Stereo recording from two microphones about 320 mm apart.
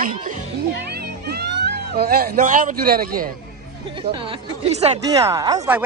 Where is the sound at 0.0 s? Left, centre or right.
Right.